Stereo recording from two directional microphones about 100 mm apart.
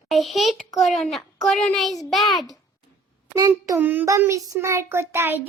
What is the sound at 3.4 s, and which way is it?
Speech, 35° right (ahead or behind).